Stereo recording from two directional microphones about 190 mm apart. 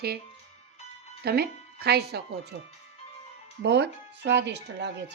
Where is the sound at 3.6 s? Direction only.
65° right (ahead or behind).